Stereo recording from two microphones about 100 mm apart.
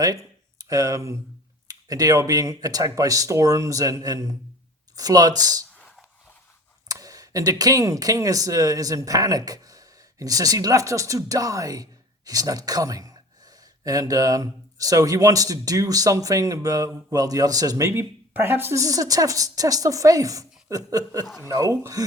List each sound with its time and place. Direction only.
0.6 s speech: 35° right (ahead or behind)
6.8 s speech: 35° right (ahead or behind)
17.9 s speech: 20° right (ahead or behind)
18.8 s speech: 35° right (ahead or behind)